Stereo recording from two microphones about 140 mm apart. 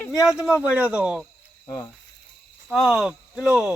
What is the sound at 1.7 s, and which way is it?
Cricket, 25° left (ahead or behind).